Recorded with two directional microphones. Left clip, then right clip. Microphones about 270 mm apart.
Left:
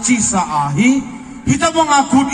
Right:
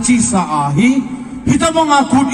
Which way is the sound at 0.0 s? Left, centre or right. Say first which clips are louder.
Right 1 dB; right.